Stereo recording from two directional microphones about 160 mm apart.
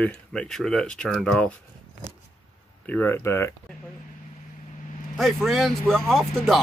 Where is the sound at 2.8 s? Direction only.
10° left (ahead or behind).